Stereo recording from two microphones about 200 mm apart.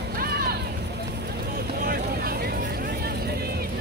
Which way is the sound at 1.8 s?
50° right (ahead or behind).